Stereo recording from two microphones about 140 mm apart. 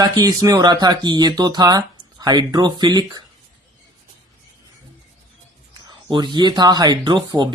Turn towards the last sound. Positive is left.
turn(degrees=-30)  # may be behind; listen again after turning